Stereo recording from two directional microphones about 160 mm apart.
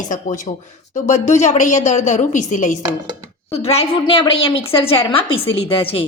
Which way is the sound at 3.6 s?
40° left (ahead or behind).